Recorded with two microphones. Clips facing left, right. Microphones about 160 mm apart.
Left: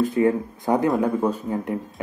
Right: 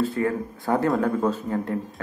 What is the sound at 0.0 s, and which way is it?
Speech, 15° left (ahead or behind).